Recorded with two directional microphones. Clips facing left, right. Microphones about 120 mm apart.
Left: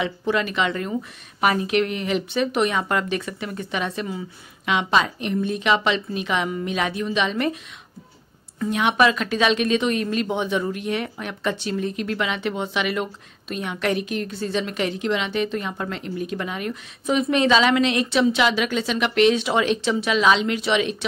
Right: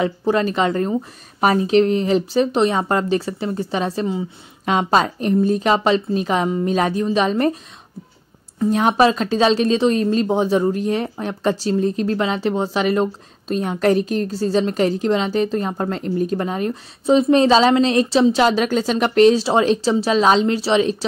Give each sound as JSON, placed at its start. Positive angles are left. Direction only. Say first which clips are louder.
{"t": 0.0, "sound": "speech", "louder": "right 5 dB", "side_deg": -35}
{"t": 8.5, "sound": "speech", "louder": "right 4 dB", "side_deg": -35}